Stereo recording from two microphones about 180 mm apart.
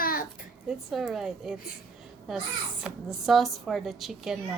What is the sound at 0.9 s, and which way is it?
Speech, centre (ahead or behind).